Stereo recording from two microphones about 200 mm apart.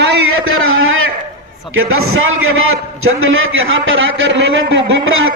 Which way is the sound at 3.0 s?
90° right.